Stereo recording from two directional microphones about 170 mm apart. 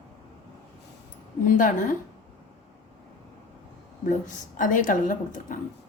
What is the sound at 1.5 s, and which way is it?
Speech, 50° left (ahead or behind).